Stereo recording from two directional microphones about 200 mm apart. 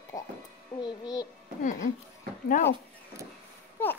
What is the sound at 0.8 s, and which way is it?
Speech, 20° left (ahead or behind).